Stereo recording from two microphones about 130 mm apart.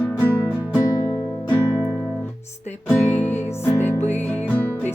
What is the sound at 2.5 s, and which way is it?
Music, 60° left (ahead or behind).